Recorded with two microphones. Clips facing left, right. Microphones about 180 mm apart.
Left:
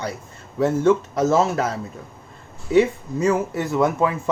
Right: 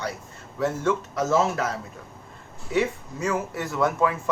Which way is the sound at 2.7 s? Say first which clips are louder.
Left 8 dB; 30° left (ahead or behind).